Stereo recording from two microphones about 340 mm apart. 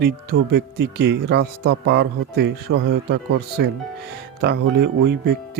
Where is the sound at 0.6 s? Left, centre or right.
Right.